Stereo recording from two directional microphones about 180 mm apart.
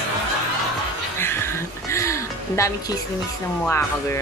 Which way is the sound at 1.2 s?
15° left (ahead or behind).